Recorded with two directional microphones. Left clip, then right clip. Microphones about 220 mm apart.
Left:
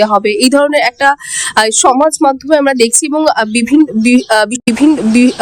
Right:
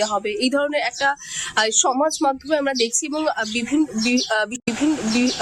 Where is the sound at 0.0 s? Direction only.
40° left (ahead or behind).